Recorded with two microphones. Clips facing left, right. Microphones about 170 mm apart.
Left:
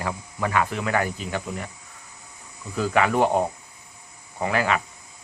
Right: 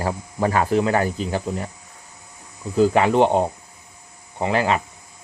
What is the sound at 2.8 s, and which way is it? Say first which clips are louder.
Speech: right 5 dB; 30° right (ahead or behind).